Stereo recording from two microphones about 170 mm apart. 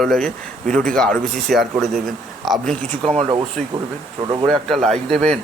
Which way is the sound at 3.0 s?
35° right (ahead or behind).